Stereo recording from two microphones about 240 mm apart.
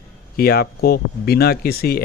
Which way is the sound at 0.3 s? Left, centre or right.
Left.